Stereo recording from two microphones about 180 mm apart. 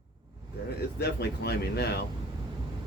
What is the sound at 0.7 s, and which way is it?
Speech, 65° left (ahead or behind).